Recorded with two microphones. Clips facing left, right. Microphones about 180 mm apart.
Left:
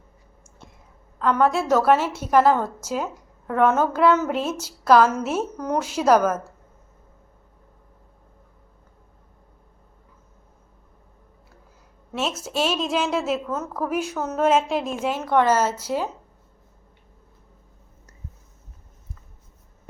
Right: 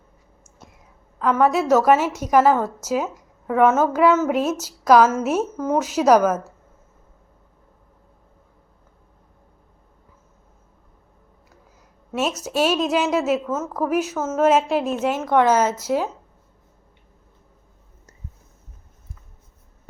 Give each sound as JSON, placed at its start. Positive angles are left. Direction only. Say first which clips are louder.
{"t": 1.2, "sound": "a woman's voice", "louder": "right 2 dB", "side_deg": -5}
{"t": 12.5, "sound": "a woman's voice", "louder": "right 5 dB", "side_deg": -10}